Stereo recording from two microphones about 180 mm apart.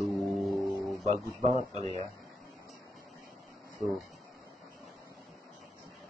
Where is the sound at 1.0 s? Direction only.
35° right (ahead or behind).